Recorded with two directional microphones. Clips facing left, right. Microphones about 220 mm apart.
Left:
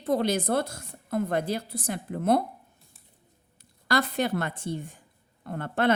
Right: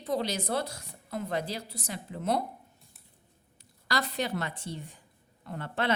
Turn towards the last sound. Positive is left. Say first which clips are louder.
# left 6 dB
turn(degrees=50)  # may be behind; listen again after turning